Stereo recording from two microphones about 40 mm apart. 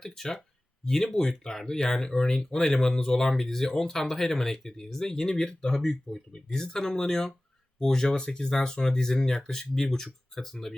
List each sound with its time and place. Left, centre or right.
0.0 s speech: centre